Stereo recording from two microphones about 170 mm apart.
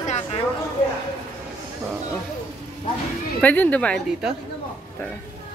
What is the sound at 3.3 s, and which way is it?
Speech, 10° left (ahead or behind).